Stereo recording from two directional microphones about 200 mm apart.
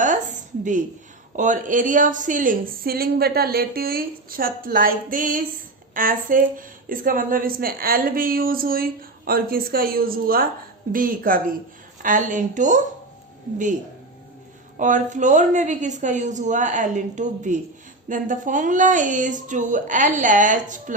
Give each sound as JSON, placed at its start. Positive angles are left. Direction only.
{"t": 1.4, "sound": "a woman's voice", "side_deg": -40}
{"t": 14.8, "sound": "a woman's voice", "side_deg": -40}